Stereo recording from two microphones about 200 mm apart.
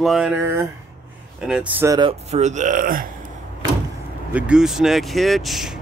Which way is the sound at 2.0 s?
35° right (ahead or behind).